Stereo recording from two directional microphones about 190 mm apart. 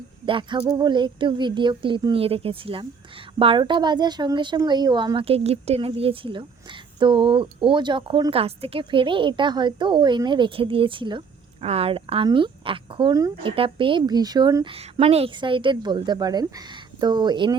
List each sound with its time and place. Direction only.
0.3 s speech: 25° right (ahead or behind)